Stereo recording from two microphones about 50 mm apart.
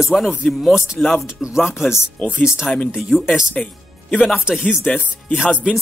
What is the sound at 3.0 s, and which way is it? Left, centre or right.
Speech, centre.